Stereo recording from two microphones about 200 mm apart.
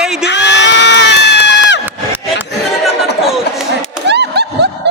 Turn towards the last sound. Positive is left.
turn(degrees=-55)  # may be behind; listen again after turning